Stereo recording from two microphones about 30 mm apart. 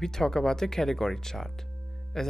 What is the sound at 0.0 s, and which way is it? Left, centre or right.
Speech, centre.